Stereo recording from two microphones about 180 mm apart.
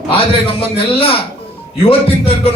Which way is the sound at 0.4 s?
30° left (ahead or behind).